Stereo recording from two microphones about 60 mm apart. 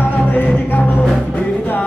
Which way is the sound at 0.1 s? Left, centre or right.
Left.